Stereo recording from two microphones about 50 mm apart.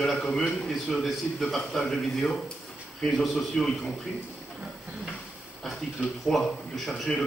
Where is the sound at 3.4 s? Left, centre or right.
Centre.